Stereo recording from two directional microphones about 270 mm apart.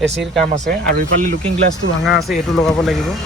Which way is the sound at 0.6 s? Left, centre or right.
Right.